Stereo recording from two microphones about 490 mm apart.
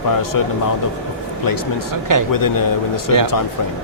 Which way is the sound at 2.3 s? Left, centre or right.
Left.